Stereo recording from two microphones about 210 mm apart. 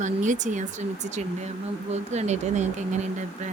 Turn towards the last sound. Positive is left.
turn(degrees=-35)  # may be behind; listen again after turning